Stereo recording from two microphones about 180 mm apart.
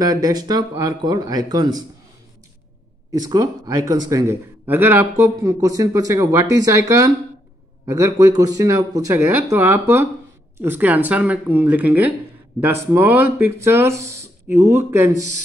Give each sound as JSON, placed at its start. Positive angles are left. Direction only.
{"t": 0.0, "sound": "speech", "side_deg": -20}
{"t": 3.1, "sound": "a man's voice", "side_deg": -20}